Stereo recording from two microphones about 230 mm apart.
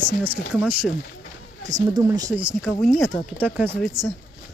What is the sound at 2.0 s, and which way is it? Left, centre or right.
Speech, centre.